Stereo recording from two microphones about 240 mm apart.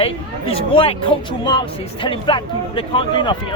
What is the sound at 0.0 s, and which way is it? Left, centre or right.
Speech, left.